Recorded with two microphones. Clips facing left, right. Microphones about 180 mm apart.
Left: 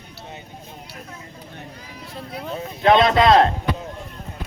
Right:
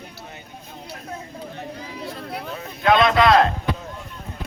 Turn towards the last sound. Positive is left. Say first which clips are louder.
# left 1 dB
turn(degrees=25)  # may be behind; listen again after turning